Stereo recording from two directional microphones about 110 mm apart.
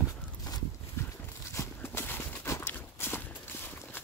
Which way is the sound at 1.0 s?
20° left (ahead or behind).